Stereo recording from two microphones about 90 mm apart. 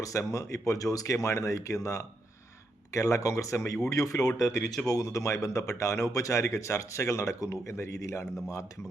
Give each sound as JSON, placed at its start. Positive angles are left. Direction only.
{"t": 0.0, "sound": "speech", "side_deg": 35}